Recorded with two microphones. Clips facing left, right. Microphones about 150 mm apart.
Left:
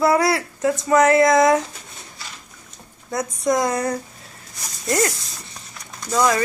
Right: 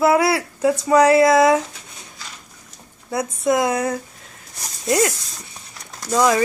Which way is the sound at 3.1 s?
5° right (ahead or behind).